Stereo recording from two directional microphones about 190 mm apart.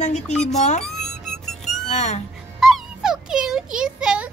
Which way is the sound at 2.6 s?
Centre (ahead or behind).